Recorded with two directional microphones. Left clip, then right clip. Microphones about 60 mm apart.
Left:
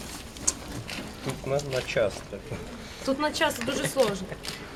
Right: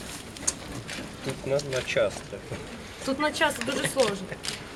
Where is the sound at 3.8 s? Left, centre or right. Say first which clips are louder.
Even; right.